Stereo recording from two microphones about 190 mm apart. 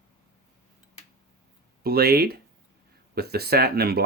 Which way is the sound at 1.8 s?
55° right (ahead or behind).